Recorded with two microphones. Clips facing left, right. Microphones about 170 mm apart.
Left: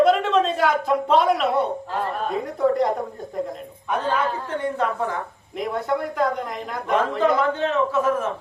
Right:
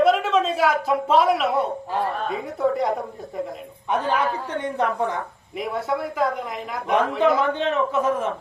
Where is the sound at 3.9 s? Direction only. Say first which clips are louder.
Right 1 dB; 15° right (ahead or behind).